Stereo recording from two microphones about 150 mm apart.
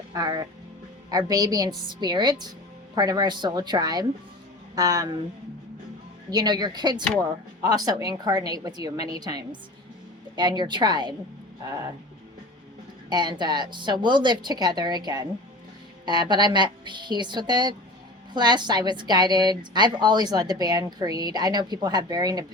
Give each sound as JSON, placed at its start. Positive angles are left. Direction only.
{"t": 0.1, "sound": "a woman's voice", "side_deg": -25}
{"t": 6.3, "sound": "a woman's voice", "side_deg": -30}
{"t": 13.1, "sound": "a woman's voice", "side_deg": -30}